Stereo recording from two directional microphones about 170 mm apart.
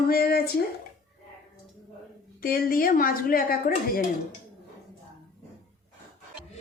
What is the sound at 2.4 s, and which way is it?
A woman's voice, 60° left (ahead or behind).